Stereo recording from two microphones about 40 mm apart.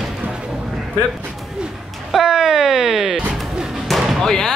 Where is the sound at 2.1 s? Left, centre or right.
Centre.